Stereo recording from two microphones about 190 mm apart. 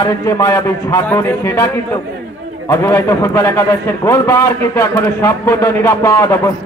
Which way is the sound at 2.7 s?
15° left (ahead or behind).